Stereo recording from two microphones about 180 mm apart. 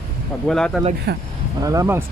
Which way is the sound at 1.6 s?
20° right (ahead or behind).